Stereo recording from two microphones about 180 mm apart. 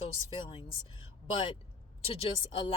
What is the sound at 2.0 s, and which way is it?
Speech, 30° left (ahead or behind).